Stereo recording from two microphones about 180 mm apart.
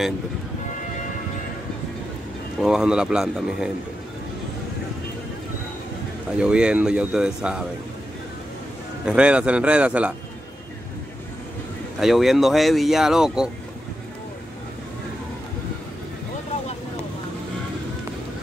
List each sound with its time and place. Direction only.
2.6 s speech: 5° right (ahead or behind)
6.3 s speech: 5° right (ahead or behind)
9.0 s a man's voice: 5° right (ahead or behind)
12.0 s speech: centre (ahead or behind)